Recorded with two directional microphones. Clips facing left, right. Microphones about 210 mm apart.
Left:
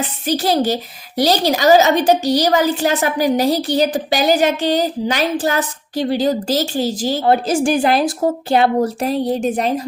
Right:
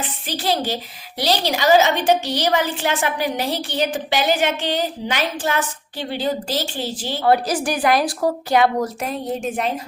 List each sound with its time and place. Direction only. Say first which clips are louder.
0.0 s a woman's voice: left 7 dB; 40° left (ahead or behind)
7.3 s a woman's voice: left 2 dB; 25° left (ahead or behind)